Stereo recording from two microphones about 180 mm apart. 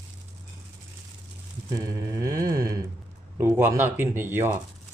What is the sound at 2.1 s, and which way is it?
Speech, 15° right (ahead or behind).